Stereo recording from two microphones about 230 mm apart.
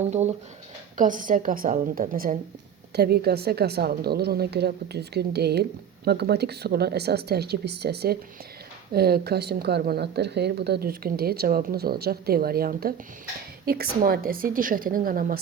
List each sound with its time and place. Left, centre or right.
0.1 s a woman's voice: right